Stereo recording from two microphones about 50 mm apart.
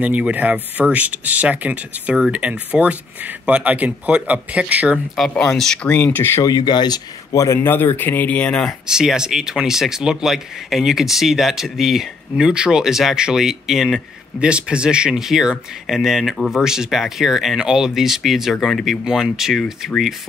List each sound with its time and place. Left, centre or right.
0.0 s speech: right
5.5 s speech: centre
5.9 s speech: left
7.3 s speech: left
7.6 s speech: left
8.3 s speech: left
8.8 s speech: centre
12.4 s speech: centre